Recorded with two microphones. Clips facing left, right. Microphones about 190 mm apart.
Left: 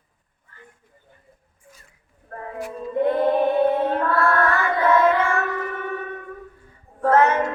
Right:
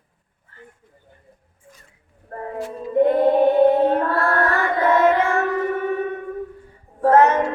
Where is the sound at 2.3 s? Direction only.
35° right (ahead or behind).